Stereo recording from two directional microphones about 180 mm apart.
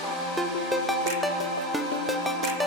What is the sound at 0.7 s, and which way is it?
Music, centre (ahead or behind).